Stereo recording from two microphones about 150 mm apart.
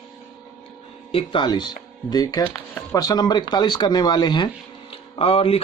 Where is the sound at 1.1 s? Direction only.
35° left (ahead or behind).